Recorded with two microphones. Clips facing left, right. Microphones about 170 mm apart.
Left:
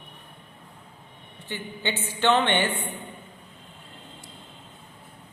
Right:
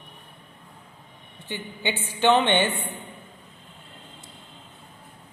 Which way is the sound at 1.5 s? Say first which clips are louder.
Right 1 dB; 15° right (ahead or behind).